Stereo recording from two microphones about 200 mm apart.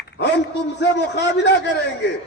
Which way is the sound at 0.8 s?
60° left (ahead or behind).